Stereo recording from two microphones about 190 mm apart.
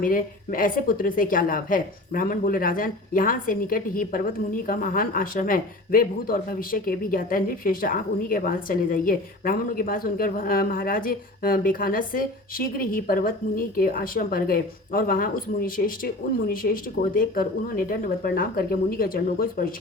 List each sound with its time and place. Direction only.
0.0 s a woman's voice: 45° left (ahead or behind)